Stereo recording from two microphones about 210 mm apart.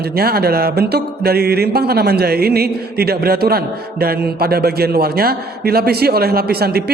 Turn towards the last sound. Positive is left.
turn(degrees=-50)  # may be behind; listen again after turning